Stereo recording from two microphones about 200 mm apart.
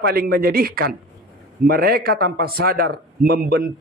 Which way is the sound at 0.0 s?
50° right (ahead or behind).